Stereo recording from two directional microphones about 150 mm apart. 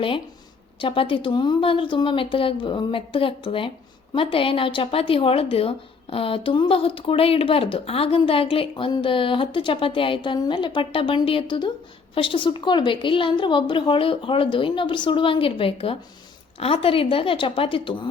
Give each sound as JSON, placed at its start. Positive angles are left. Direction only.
{"t": 0.8, "sound": "a woman's voice", "side_deg": 35}